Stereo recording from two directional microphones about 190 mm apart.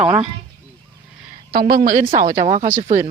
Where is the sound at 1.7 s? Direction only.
45° right (ahead or behind).